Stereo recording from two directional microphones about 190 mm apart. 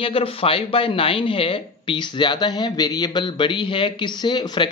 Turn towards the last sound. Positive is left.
turn(degrees=25)  # may be behind; listen again after turning